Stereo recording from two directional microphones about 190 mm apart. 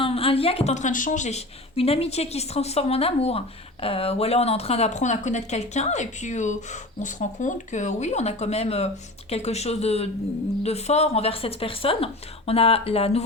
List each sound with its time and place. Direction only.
0.0 s a woman's voice: 30° left (ahead or behind)